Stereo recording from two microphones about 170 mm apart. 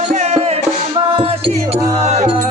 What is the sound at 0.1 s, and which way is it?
Music, 40° right (ahead or behind).